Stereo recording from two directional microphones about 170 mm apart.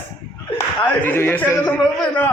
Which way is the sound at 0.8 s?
10° left (ahead or behind).